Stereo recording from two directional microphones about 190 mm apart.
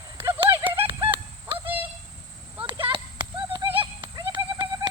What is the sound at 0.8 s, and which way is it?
Fowl, 25° right (ahead or behind).